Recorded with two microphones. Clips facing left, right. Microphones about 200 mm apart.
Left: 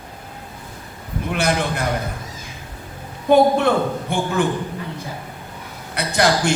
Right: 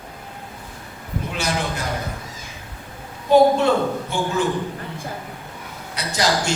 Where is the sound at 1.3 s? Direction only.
55° left (ahead or behind).